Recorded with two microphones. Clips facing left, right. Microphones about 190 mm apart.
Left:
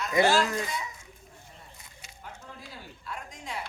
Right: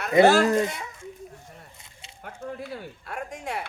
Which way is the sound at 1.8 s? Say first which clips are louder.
Right 1 dB; 25° right (ahead or behind).